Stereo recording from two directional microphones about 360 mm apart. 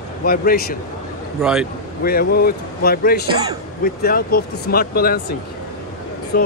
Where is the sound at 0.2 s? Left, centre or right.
Left.